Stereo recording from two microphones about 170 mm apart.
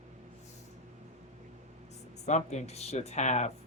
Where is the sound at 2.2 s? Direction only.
45° left (ahead or behind).